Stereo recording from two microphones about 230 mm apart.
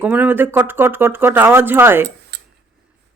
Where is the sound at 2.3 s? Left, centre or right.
Right.